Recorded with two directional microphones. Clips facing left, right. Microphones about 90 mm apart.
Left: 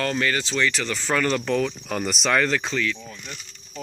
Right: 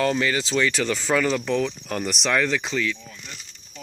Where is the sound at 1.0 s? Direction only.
5° right (ahead or behind).